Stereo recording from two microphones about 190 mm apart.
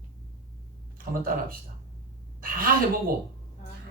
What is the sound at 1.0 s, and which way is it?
Speech, 50° right (ahead or behind).